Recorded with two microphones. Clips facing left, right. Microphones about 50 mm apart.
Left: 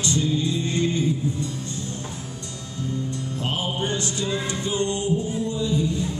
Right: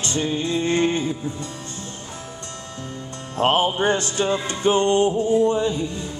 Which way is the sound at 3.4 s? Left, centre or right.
Right.